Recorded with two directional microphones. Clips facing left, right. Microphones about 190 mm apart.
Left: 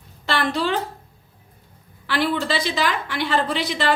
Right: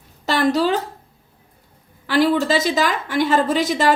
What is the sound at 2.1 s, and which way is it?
A woman's voice, 40° right (ahead or behind).